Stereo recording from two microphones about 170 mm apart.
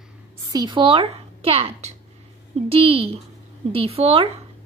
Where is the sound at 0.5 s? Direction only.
25° right (ahead or behind).